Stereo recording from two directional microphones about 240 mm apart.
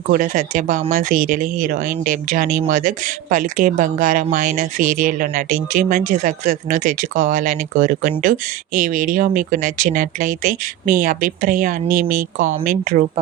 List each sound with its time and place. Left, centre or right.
0.1 s speech: right